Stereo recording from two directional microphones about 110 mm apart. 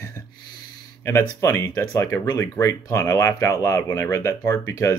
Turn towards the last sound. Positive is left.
turn(degrees=25)  # may be behind; listen again after turning